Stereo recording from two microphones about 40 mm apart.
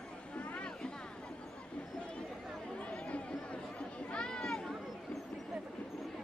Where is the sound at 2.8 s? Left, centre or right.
Left.